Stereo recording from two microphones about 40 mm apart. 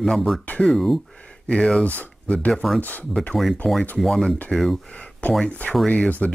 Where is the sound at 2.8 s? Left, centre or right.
Left.